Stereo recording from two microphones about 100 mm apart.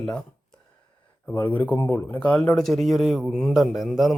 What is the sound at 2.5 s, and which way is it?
Speech, centre (ahead or behind).